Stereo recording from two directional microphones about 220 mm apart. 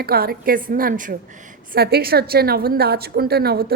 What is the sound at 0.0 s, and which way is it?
A woman's voice, 45° right (ahead or behind).